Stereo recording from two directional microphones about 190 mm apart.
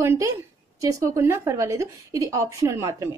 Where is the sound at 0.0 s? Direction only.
15° right (ahead or behind).